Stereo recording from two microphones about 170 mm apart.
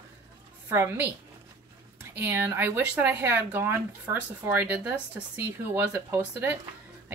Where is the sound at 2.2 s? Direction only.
15° right (ahead or behind).